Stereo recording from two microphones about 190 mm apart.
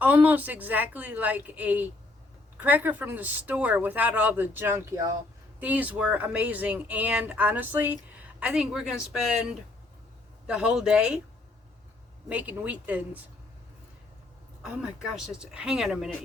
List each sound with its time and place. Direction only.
0.0 s speech: 10° right (ahead or behind)
12.3 s speech: 10° right (ahead or behind)
14.6 s speech: 5° right (ahead or behind)